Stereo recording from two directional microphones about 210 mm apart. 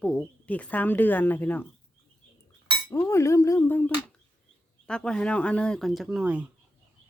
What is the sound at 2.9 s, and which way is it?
Speech, 15° left (ahead or behind).